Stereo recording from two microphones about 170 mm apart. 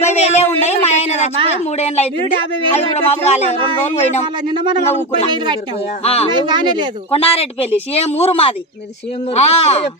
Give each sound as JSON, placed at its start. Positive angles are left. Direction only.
{"t": 0.0, "sound": "a sound", "side_deg": 40}
{"t": 1.7, "sound": "speech", "side_deg": 40}
{"t": 2.1, "sound": "speech", "side_deg": -30}
{"t": 2.7, "sound": "speech", "side_deg": 40}
{"t": 4.4, "sound": "speech", "side_deg": -25}
{"t": 4.8, "sound": "speech", "side_deg": 40}
{"t": 6.4, "sound": "speech", "side_deg": -25}
{"t": 7.1, "sound": "speech", "side_deg": 35}